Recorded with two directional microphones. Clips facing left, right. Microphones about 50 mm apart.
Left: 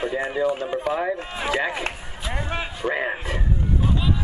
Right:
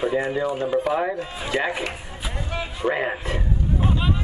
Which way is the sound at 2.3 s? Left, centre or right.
Left.